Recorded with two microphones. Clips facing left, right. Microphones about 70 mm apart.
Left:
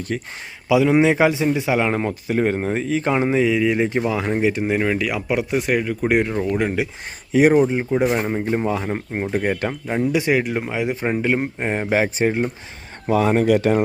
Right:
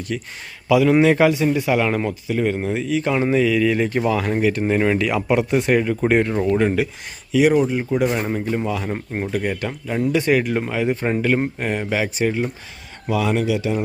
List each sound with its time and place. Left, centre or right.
0.1 s speech: left
0.7 s speech: centre
2.0 s speech: left
3.2 s speech: left; by 6.1 s centre
6.1 s speech: centre
7.3 s speech: left
7.6 s speech: left
8.0 s speech: centre
8.4 s speech: left
8.9 s speech: centre
9.3 s speech: left
10.1 s speech: centre
11.7 s speech: left